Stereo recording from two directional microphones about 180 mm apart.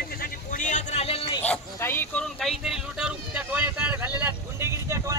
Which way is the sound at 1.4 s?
10° left (ahead or behind).